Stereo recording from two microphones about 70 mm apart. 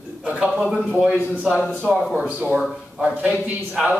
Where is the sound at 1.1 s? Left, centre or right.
Centre.